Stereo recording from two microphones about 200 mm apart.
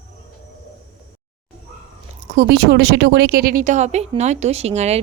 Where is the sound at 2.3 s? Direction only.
55° right (ahead or behind).